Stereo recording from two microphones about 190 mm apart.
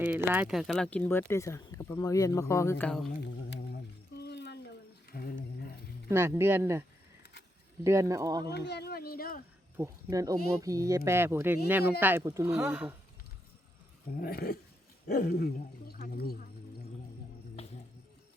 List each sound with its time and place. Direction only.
0.0 s speech: 10° right (ahead or behind)
3.2 s humming: 60° left (ahead or behind)
4.2 s a sound: 65° left (ahead or behind)
5.1 s wild animals: 55° left (ahead or behind)
6.1 s speech: 15° right (ahead or behind)
7.9 s speech: 15° right (ahead or behind)
8.5 s speech: 65° left (ahead or behind)
9.7 s speech: 15° right (ahead or behind)
14.2 s speech: 55° left (ahead or behind)
17.6 s music: 35° left (ahead or behind)